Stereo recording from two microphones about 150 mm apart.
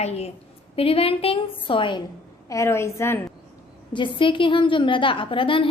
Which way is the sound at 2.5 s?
20° left (ahead or behind).